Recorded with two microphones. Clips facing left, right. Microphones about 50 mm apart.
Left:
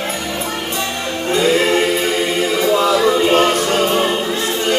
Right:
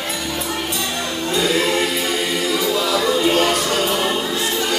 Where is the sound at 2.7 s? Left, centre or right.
Left.